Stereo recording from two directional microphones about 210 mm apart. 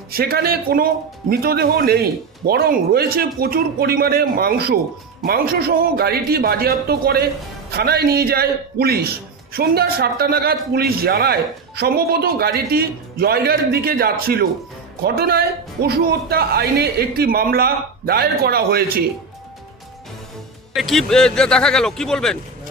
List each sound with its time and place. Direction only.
0.1 s a man's voice: 45° right (ahead or behind)
20.7 s speech: centre (ahead or behind)